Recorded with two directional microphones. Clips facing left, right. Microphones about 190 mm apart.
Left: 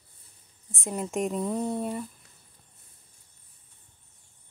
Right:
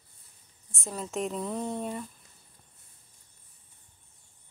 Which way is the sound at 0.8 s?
15° left (ahead or behind).